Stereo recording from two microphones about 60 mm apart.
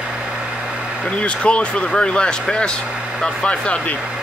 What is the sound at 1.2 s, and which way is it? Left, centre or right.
Speech, centre.